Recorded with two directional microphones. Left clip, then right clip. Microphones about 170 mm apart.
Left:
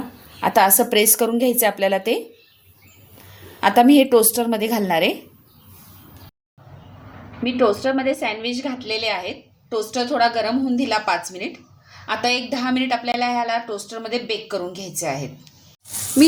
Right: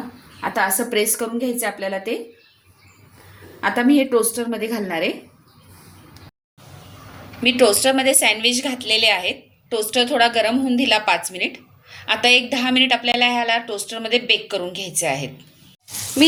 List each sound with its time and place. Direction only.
0.3 s a woman's voice: 60° left (ahead or behind)
3.6 s a woman's voice: 55° left (ahead or behind)
7.6 s a woman's voice: 30° left (ahead or behind)